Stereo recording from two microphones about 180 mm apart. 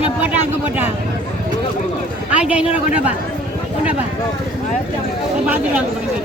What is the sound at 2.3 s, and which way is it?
Speech, 5° right (ahead or behind).